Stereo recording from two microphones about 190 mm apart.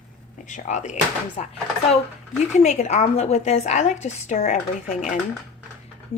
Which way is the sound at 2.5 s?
35° left (ahead or behind).